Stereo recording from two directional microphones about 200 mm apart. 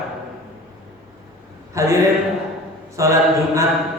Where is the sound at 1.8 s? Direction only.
15° right (ahead or behind).